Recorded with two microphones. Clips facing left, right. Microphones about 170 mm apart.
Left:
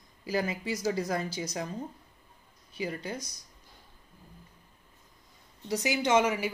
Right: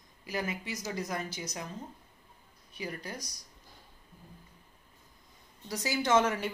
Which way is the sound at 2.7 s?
25° left (ahead or behind).